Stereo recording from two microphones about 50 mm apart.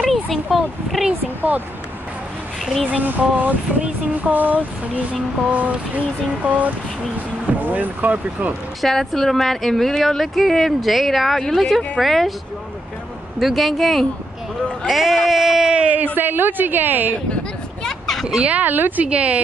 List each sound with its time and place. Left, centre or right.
0.1 s a child's voice: centre
2.6 s speech: centre
2.9 s a woman's voice: right
8.8 s speech: centre
13.4 s speech: centre
15.9 s a woman's voice: right
17.8 s a sound: centre
18.4 s a woman's voice: right
19.0 s speech: right